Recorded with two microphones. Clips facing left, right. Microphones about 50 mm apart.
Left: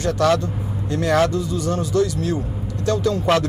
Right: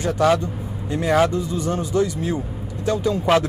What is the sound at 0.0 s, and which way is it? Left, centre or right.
Speech, centre.